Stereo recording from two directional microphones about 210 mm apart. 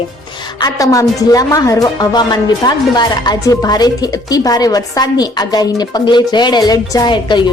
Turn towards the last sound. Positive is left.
turn(degrees=20)  # may be behind; listen again after turning